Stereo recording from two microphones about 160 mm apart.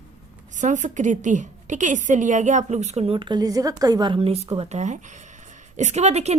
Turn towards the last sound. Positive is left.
turn(degrees=-45)  # may be behind; listen again after turning